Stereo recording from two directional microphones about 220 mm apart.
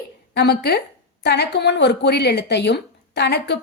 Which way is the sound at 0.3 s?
50° left (ahead or behind).